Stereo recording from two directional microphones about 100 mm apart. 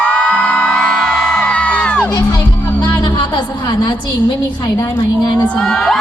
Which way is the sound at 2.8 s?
50° left (ahead or behind).